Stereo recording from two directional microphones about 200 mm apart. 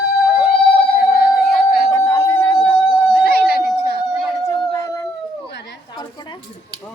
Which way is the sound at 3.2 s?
50° left (ahead or behind).